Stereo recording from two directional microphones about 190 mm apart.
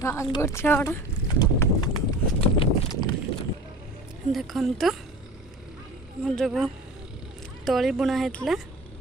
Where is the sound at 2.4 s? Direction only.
30° left (ahead or behind).